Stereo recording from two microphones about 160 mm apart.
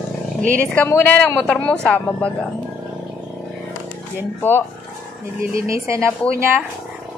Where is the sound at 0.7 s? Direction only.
15° left (ahead or behind).